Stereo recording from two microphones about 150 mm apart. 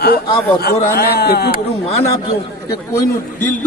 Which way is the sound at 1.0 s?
90° left.